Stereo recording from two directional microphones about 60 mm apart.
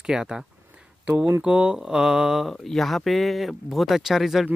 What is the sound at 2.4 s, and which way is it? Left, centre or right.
Speech, centre.